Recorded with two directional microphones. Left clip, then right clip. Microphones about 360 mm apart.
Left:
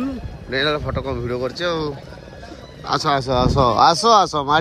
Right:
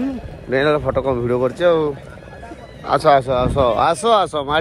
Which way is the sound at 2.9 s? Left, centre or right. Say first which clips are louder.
Right 5 dB; centre.